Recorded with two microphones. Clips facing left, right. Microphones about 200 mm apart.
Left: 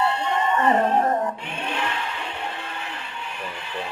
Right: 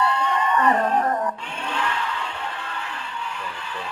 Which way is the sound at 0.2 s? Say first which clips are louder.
Even; 25° left (ahead or behind).